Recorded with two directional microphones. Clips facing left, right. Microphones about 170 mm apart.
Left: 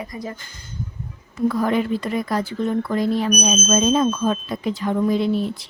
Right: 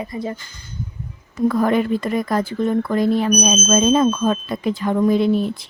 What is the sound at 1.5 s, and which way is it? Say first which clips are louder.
A woman's voice: right 4 dB; 50° right (ahead or behind).